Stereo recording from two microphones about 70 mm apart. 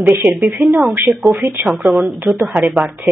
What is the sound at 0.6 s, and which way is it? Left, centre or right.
Speech, centre.